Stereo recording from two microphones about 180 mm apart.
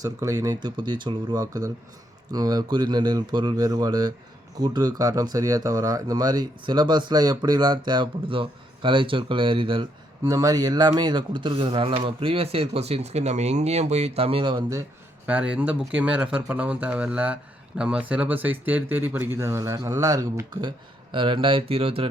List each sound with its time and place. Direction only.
0.0 s speech: 20° right (ahead or behind)
15.3 s speech: 5° right (ahead or behind); by 22.1 s 30° right (ahead or behind)